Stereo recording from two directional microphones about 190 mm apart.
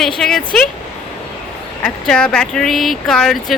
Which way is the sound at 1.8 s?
5° left (ahead or behind).